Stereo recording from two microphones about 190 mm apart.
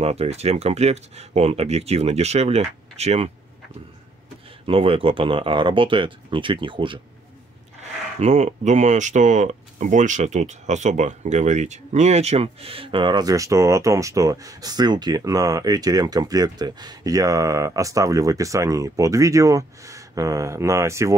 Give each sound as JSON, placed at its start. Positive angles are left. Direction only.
{"t": 0.0, "sound": "speech", "side_deg": -35}
{"t": 4.6, "sound": "speech", "side_deg": -30}
{"t": 8.2, "sound": "speech", "side_deg": -35}